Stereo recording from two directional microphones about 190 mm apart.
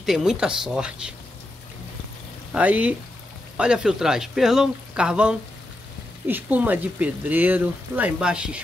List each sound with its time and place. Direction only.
0.0 s speech: centre (ahead or behind)
2.5 s speech: 10° right (ahead or behind)